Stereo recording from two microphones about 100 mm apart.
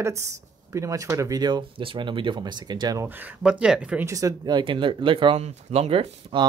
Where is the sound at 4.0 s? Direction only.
35° right (ahead or behind).